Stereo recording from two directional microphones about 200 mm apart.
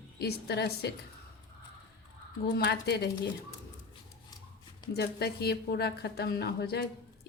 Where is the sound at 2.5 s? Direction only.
55° left (ahead or behind).